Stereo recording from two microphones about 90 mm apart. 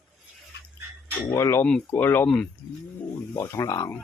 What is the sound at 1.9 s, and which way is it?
Speech, 25° left (ahead or behind).